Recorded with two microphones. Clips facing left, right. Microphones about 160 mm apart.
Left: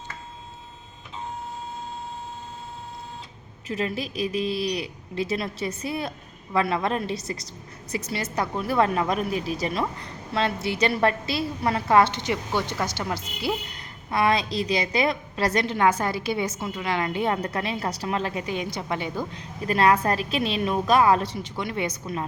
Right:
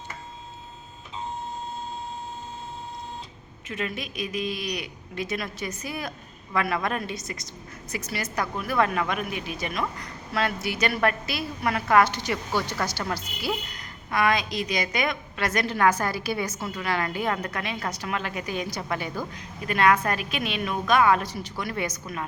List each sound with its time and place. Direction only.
3.7 s a woman's voice: 35° left (ahead or behind)
15.6 s a woman's voice: 20° left (ahead or behind)